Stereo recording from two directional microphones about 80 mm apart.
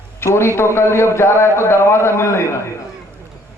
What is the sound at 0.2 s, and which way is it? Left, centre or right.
A man's voice, left.